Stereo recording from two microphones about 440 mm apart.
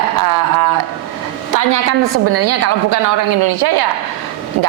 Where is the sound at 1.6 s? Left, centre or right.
Right.